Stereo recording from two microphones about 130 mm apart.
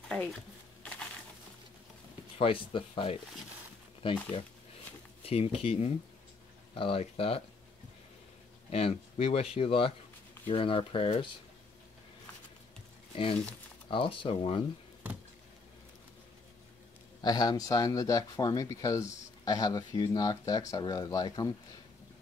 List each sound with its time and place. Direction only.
0.1 s a sound: 5° left (ahead or behind)
2.3 s speech: 45° left (ahead or behind)
8.6 s speech: 45° left (ahead or behind)
13.1 s speech: 45° left (ahead or behind)
17.2 s speech: 30° left (ahead or behind)